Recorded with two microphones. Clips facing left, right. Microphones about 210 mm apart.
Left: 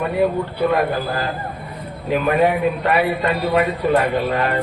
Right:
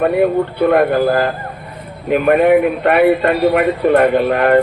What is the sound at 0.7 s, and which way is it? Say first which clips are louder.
A man's voice: right 7 dB; 55° right (ahead or behind).